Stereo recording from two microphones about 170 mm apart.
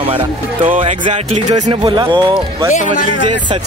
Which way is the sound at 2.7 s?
50° left (ahead or behind).